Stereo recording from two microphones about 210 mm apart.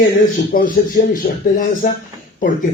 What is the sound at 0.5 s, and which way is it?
Speech, 45° left (ahead or behind).